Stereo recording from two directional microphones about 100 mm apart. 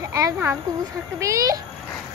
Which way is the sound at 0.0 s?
35° right (ahead or behind).